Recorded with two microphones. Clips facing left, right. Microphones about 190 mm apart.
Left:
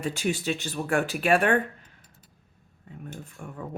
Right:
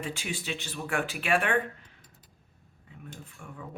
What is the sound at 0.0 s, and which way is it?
Speech, 40° left (ahead or behind).